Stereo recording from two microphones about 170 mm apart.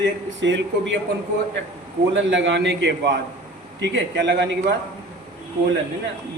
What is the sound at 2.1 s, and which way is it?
A man's voice, 90° right.